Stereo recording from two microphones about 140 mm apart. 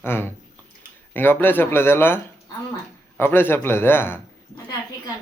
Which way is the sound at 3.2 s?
15° left (ahead or behind).